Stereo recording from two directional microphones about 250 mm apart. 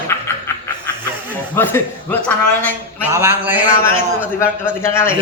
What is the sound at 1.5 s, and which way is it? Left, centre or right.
Speech, centre.